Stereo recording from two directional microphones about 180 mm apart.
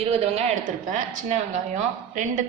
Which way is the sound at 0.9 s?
45° right (ahead or behind).